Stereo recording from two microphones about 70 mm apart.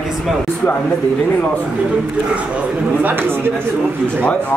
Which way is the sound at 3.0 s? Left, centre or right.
Right.